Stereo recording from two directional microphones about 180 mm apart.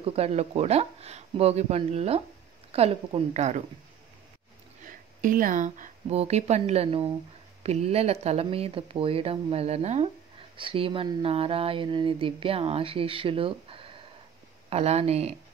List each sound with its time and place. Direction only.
0.0 s speech: 35° right (ahead or behind)
4.8 s speech: 50° right (ahead or behind)